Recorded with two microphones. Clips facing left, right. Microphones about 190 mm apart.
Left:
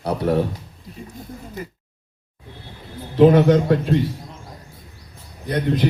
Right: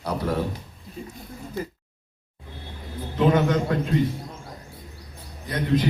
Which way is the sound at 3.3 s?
35° left (ahead or behind).